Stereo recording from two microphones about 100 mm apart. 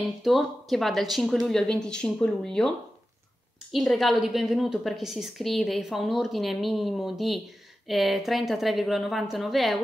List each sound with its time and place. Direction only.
0.2 s a woman's voice: centre (ahead or behind)
3.7 s a woman's voice: centre (ahead or behind)